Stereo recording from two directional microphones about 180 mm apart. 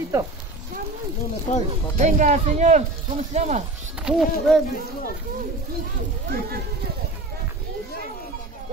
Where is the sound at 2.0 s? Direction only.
40° right (ahead or behind).